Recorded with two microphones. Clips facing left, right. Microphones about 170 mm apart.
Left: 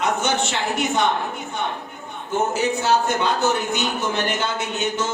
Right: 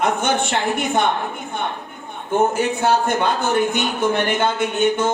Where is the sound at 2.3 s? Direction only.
55° right (ahead or behind).